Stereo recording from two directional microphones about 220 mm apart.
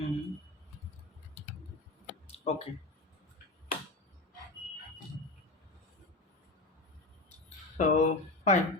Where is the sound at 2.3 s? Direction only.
30° left (ahead or behind).